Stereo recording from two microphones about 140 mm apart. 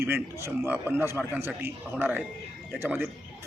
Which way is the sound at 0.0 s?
20° right (ahead or behind).